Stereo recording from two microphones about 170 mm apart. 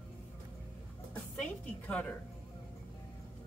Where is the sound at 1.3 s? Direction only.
5° left (ahead or behind).